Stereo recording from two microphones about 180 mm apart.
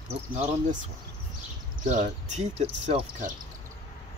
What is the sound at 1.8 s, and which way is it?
Speech, 45° right (ahead or behind).